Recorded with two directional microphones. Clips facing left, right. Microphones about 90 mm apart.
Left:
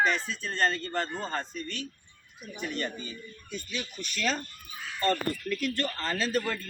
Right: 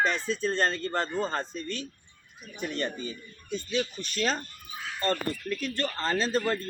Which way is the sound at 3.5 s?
35° right (ahead or behind).